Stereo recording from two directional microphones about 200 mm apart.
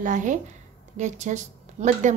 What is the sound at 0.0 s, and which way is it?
A woman's voice, 40° right (ahead or behind).